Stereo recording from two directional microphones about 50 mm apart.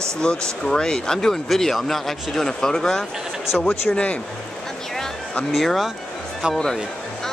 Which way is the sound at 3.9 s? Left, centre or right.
Left.